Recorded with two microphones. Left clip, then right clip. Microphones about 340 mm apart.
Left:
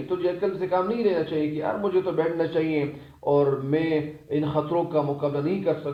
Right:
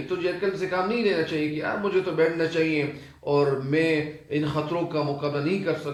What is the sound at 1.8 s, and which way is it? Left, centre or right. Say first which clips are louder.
Speech: right 2 dB; centre.